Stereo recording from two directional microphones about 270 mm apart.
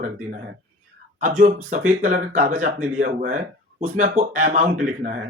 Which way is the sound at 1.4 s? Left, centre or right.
Right.